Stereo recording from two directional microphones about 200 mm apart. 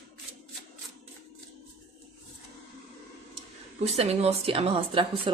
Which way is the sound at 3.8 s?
30° right (ahead or behind).